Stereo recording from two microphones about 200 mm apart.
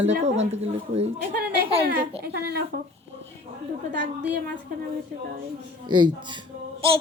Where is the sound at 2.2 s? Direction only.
55° right (ahead or behind).